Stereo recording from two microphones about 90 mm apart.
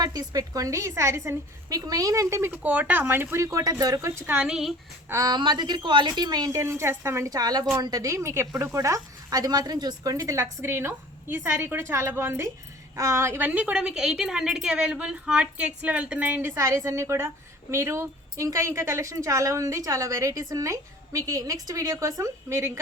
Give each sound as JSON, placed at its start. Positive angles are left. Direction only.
{"t": 0.0, "sound": "a woman's voice", "side_deg": -45}
{"t": 1.7, "sound": "a woman's voice", "side_deg": -45}
{"t": 2.6, "sound": "speech", "side_deg": -20}
{"t": 3.4, "sound": "a woman's voice", "side_deg": -40}
{"t": 4.4, "sound": "speech", "side_deg": -5}
{"t": 5.2, "sound": "a woman's voice", "side_deg": -50}
{"t": 6.6, "sound": "speech", "side_deg": -30}
{"t": 7.3, "sound": "a woman's voice", "side_deg": -45}